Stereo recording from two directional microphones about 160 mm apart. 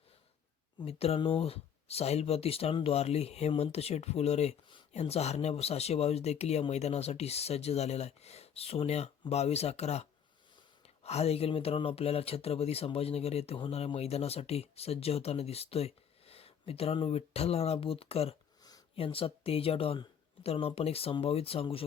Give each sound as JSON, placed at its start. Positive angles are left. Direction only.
{"t": 0.8, "sound": "speech", "side_deg": 40}